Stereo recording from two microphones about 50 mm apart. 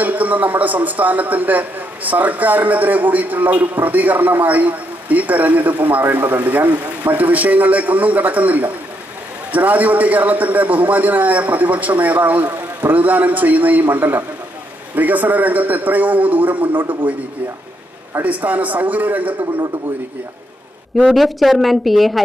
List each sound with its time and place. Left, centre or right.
0.0 s a man's voice: right
18.2 s a man's voice: right
21.1 s speech: centre